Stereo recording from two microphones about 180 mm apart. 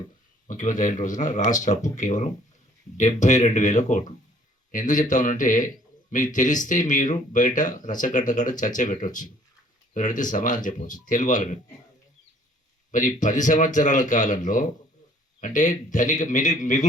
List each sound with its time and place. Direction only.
0.4 s a man's voice: 45° left (ahead or behind)
12.9 s a man's voice: 45° left (ahead or behind)